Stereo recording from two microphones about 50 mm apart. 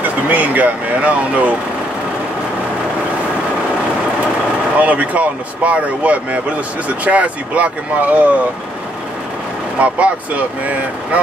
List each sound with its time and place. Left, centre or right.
0.3 s speech: right
4.7 s speech: right
9.8 s speech: right